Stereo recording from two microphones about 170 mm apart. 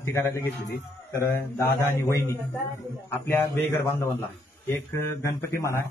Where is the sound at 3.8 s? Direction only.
15° left (ahead or behind).